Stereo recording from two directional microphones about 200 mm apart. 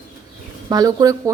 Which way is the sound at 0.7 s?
20° right (ahead or behind).